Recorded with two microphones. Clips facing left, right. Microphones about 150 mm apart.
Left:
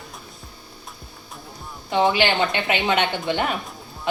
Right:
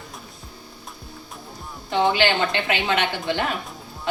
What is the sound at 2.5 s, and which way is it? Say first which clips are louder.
A woman's voice: left 1 dB; 20° left (ahead or behind).